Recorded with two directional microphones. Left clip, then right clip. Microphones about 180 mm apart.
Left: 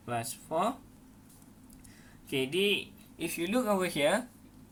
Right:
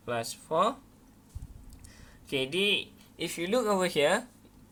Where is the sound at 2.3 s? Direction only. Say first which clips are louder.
Right 1 dB; 60° right (ahead or behind).